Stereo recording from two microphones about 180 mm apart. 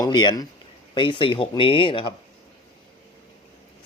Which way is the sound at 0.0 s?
25° left (ahead or behind).